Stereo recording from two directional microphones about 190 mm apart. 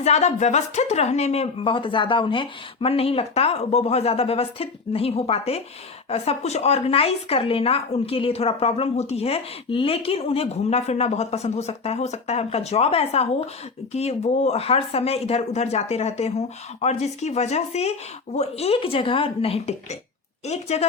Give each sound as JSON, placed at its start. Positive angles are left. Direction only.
{"t": 0.0, "sound": "speech", "side_deg": 35}